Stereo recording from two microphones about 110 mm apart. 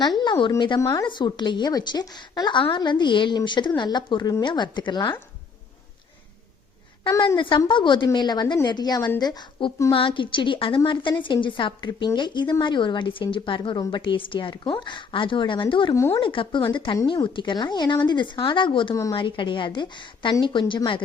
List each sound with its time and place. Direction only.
0.2 s a woman's voice: 45° left (ahead or behind)
0.8 s speech: 30° left (ahead or behind)
1.0 s a woman's voice: 45° left (ahead or behind)
7.3 s a woman's voice: 50° left (ahead or behind)
15.9 s speech: 30° left (ahead or behind)
16.2 s a woman's voice: 50° left (ahead or behind)